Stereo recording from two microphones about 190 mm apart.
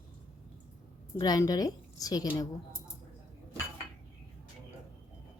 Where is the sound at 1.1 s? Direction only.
20° left (ahead or behind).